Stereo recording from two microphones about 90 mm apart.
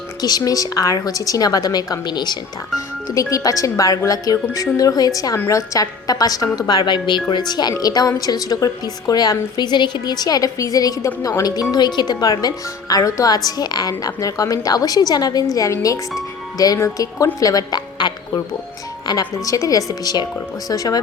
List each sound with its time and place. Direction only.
0.2 s a woman's voice: 45° left (ahead or behind)
2.7 s a woman's voice: 40° left (ahead or behind)